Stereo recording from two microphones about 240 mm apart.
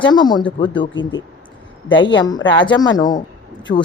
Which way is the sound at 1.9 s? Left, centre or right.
Centre.